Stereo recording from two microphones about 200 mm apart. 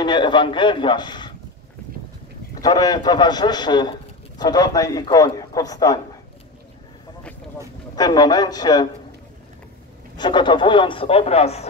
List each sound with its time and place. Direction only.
0.0 s a man's voice: 20° left (ahead or behind)
2.6 s a man's voice: 20° left (ahead or behind)
7.9 s a man's voice: 20° left (ahead or behind)
10.1 s a man's voice: 20° left (ahead or behind)